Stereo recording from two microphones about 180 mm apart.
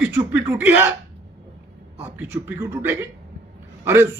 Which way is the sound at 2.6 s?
10° right (ahead or behind).